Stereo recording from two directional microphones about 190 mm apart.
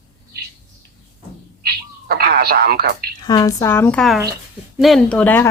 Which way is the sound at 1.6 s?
55° right (ahead or behind).